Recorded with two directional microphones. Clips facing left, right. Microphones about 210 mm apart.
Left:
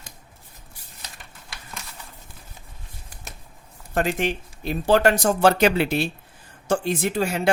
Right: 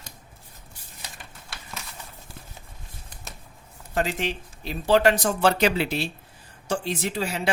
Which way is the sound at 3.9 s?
50° left (ahead or behind).